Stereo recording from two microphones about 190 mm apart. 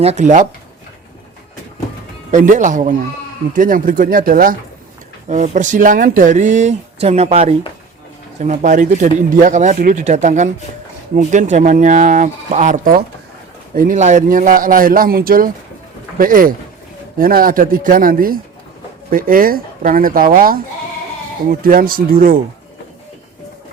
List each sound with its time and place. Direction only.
0.0 s speech: 35° right (ahead or behind)
2.3 s a man's voice: 40° right (ahead or behind)